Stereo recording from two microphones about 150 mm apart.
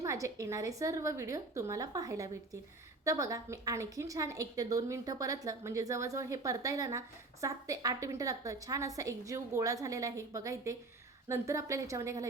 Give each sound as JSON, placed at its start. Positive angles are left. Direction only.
{"t": 0.0, "sound": "a woman's voice", "side_deg": -20}